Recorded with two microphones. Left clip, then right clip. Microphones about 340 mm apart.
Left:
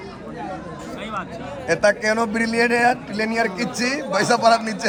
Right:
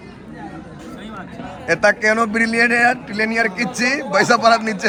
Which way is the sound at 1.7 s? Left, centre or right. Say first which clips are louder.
Right 3 dB; centre.